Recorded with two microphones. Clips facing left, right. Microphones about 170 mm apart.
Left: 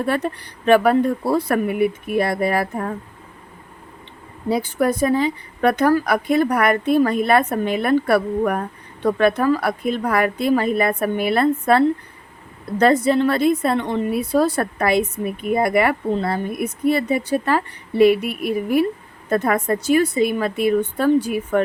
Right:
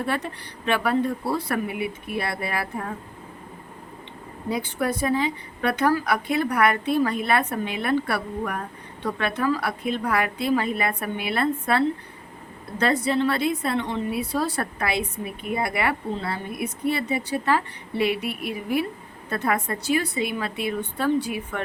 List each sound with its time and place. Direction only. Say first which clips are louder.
0.6 s a woman's voice: left 8 dB; 45° left (ahead or behind)
4.4 s a woman's voice: left 6 dB; 35° left (ahead or behind)
12.8 s a woman's voice: left 6 dB; 45° left (ahead or behind)